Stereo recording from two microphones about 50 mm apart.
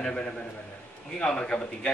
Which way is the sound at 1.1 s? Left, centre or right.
Centre.